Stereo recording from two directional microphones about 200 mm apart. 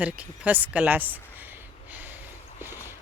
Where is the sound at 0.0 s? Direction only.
5° right (ahead or behind).